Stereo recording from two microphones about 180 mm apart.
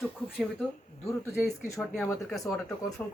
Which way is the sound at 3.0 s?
10° left (ahead or behind).